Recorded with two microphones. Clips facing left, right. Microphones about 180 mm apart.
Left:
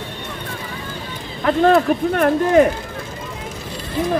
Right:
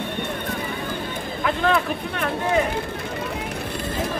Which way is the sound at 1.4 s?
50° left (ahead or behind).